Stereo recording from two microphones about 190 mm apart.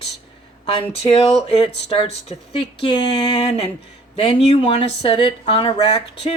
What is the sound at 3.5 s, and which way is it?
Speech, 30° left (ahead or behind).